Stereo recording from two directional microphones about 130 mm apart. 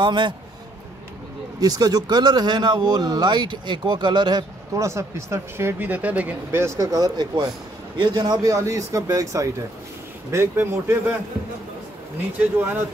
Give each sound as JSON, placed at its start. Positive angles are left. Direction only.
{"t": 0.0, "sound": "speech", "side_deg": -35}
{"t": 1.6, "sound": "a man's voice", "side_deg": -30}